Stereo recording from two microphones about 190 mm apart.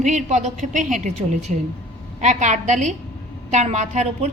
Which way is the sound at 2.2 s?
40° right (ahead or behind).